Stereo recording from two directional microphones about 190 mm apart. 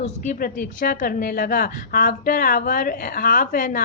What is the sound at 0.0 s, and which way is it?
A woman's voice, 45° left (ahead or behind).